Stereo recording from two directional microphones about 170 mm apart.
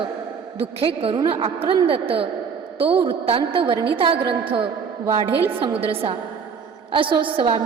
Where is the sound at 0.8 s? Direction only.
30° right (ahead or behind).